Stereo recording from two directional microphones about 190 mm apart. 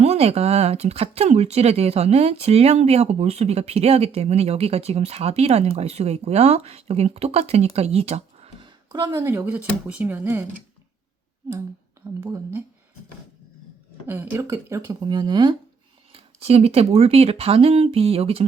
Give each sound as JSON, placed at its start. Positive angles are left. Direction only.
{"t": 0.0, "sound": "speech", "side_deg": -35}
{"t": 12.2, "sound": "speech", "side_deg": -15}
{"t": 14.1, "sound": "speech", "side_deg": -10}